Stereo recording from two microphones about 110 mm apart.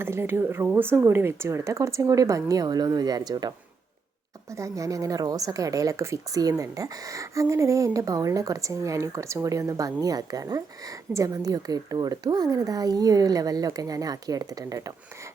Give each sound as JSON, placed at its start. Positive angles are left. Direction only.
{"t": 0.0, "sound": "speech", "side_deg": -20}
{"t": 4.5, "sound": "speech", "side_deg": -30}